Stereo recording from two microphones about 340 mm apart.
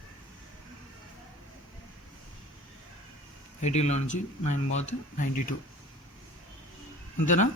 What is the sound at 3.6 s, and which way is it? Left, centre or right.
Speech, centre.